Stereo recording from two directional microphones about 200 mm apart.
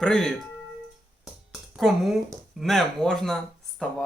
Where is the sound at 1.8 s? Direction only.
Centre (ahead or behind).